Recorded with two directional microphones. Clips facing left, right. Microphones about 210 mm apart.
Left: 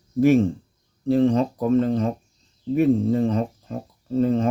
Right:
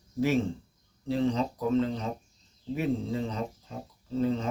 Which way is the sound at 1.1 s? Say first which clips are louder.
Left 9 dB; 55° left (ahead or behind).